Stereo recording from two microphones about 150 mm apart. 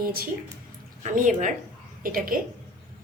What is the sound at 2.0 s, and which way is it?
Speech, 70° right (ahead or behind).